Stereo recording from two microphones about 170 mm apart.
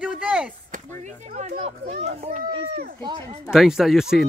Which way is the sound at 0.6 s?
50° right (ahead or behind).